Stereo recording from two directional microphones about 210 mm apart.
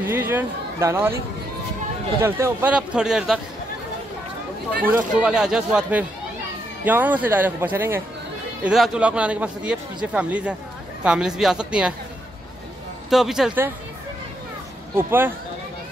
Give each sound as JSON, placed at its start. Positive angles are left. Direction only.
{"t": 0.0, "sound": "speech", "side_deg": -10}
{"t": 2.2, "sound": "speech", "side_deg": -10}
{"t": 4.9, "sound": "speech", "side_deg": -5}
{"t": 13.1, "sound": "speech", "side_deg": 0}
{"t": 15.0, "sound": "speech", "side_deg": -10}